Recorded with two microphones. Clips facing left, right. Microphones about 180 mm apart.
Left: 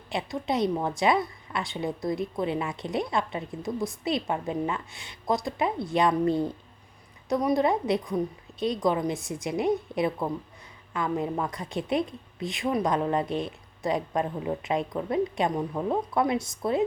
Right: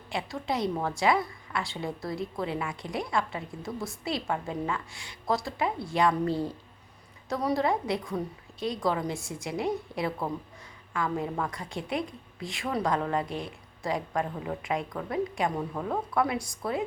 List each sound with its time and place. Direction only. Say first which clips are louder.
0.1 s a woman's voice: left 3 dB; 20° left (ahead or behind)